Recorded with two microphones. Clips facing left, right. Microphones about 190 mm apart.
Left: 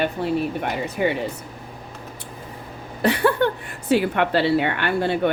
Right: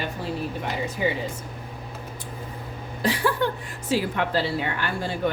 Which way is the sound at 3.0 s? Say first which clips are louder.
Left 5 dB; 60° left (ahead or behind).